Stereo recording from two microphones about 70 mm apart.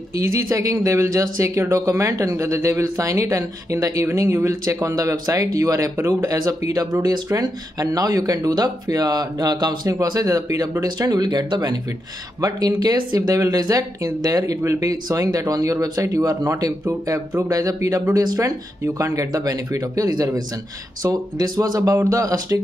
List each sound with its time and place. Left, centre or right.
0.1 s speech: right
5.9 s speech: right
6.3 s speech: right
12.4 s speech: right